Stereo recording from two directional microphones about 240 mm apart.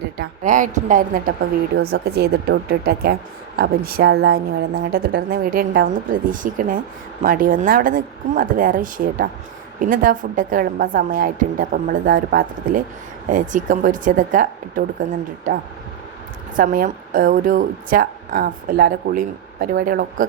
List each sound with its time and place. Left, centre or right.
0.2 s a woman's voice: right
16.6 s a woman's voice: right